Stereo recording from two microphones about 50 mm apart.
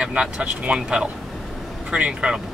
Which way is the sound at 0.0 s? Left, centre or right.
Centre.